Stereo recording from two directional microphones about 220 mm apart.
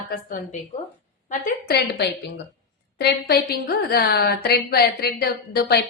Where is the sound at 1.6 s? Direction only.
45° left (ahead or behind).